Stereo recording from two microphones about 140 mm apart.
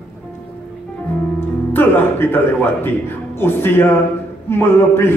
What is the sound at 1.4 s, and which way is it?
A man's voice, 15° left (ahead or behind).